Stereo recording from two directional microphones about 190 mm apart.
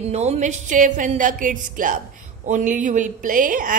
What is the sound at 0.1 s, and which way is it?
A woman's voice, 35° right (ahead or behind).